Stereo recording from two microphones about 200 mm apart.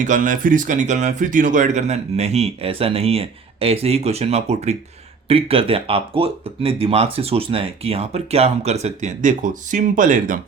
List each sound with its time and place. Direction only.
0.0 s speech: 40° right (ahead or behind)